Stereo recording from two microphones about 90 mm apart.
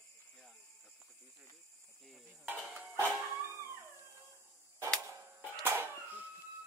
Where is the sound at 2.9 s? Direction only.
20° right (ahead or behind).